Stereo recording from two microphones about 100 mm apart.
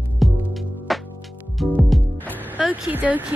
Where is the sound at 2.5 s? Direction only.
10° right (ahead or behind).